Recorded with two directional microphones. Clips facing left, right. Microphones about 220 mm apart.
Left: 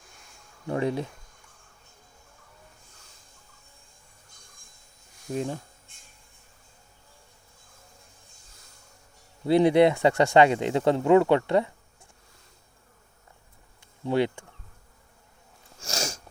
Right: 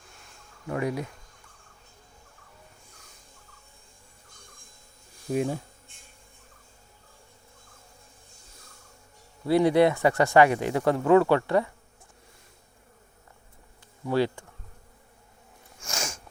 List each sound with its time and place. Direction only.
0.7 s speech: 25° left (ahead or behind)
5.3 s insect: 10° right (ahead or behind)
9.5 s speech: 20° left (ahead or behind)
14.0 s bee: 20° left (ahead or behind)
15.8 s sneeze: 40° left (ahead or behind)